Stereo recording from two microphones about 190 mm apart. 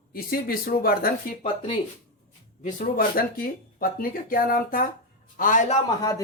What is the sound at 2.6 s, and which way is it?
Speech, 40° left (ahead or behind).